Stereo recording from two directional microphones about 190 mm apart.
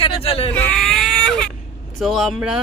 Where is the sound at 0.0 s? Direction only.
30° left (ahead or behind).